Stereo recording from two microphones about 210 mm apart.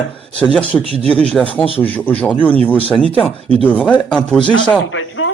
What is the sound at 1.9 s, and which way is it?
Speech, 10° left (ahead or behind).